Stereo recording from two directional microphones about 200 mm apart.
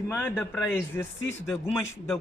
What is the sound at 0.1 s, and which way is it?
Speech, 10° left (ahead or behind).